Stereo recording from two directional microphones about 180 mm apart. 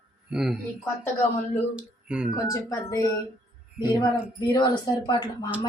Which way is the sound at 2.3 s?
20° left (ahead or behind).